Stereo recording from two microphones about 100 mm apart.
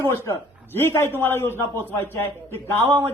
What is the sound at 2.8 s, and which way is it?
Speech, 30° right (ahead or behind).